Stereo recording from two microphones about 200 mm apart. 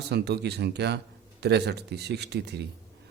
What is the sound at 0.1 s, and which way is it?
A man's voice, 55° right (ahead or behind).